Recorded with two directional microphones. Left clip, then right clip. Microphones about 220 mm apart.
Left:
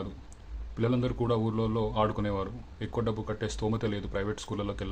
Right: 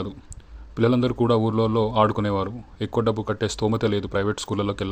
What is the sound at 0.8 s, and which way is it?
A man's voice, 35° right (ahead or behind).